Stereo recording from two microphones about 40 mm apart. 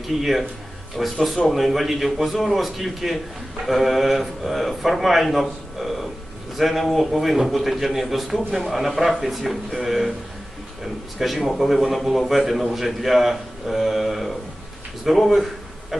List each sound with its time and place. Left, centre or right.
0.1 s a man's voice: centre
11.2 s a man's voice: centre